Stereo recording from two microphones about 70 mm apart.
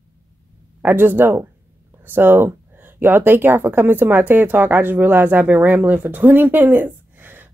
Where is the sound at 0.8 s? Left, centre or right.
Right.